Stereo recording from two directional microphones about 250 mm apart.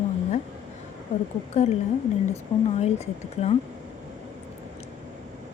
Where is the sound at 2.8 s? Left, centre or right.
Left.